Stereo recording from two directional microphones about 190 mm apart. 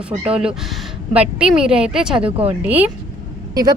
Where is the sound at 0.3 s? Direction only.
5° right (ahead or behind).